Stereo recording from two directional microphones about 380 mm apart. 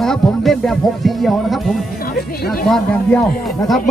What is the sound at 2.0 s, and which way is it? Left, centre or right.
Music, left.